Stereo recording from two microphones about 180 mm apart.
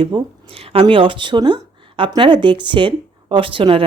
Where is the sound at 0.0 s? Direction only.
30° right (ahead or behind).